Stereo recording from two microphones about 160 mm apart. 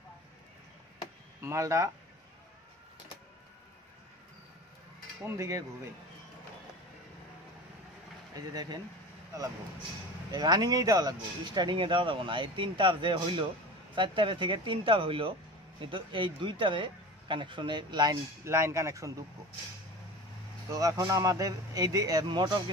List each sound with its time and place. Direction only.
1.4 s speech: 20° right (ahead or behind)
5.2 s a man's voice: 20° right (ahead or behind)
8.4 s a man's voice: 25° right (ahead or behind)
10.3 s speech: 25° right (ahead or behind)
18.4 s speech: 15° right (ahead or behind)
20.7 s a man's voice: 20° right (ahead or behind)